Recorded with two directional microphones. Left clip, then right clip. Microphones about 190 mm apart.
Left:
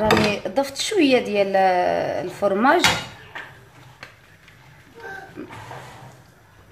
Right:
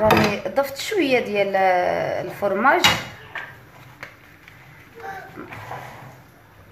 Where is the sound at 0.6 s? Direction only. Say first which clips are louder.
Left 1 dB; 25° left (ahead or behind).